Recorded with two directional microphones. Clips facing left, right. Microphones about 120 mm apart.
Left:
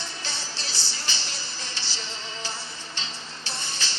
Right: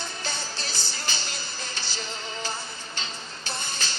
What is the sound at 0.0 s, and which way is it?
Music, 50° right (ahead or behind).